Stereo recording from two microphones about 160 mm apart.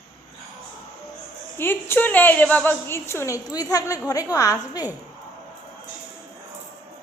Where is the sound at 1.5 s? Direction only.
15° left (ahead or behind).